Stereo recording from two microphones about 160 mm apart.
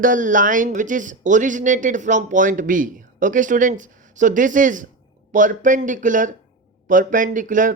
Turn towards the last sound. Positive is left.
turn(degrees=-55)  # may be behind; listen again after turning